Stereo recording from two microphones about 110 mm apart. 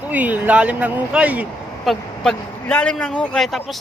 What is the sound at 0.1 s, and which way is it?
Speech, 15° right (ahead or behind).